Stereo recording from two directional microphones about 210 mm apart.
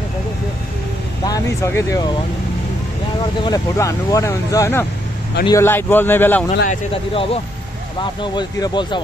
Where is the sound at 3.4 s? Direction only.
20° left (ahead or behind).